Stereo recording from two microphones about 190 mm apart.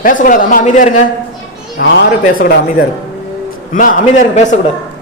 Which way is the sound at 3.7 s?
40° left (ahead or behind).